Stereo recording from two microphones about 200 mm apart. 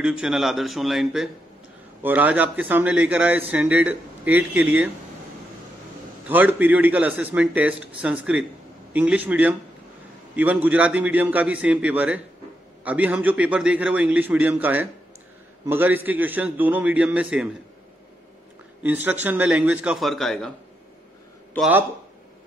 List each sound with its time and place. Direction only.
0.0 s a man's voice: 5° right (ahead or behind)
6.2 s a man's voice: 10° right (ahead or behind)
18.8 s a man's voice: 10° right (ahead or behind)
21.5 s a man's voice: 5° right (ahead or behind)